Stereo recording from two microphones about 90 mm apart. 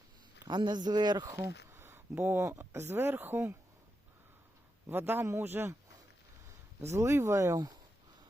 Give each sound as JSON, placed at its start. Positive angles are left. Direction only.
{"t": 0.4, "sound": "speech", "side_deg": -55}
{"t": 1.4, "sound": "speech", "side_deg": -30}
{"t": 4.9, "sound": "a man's voice", "side_deg": -25}
{"t": 6.8, "sound": "speech", "side_deg": -30}